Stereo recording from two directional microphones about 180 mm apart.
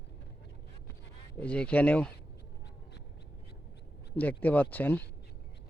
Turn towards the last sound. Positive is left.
turn(degrees=10)  # may be behind; listen again after turning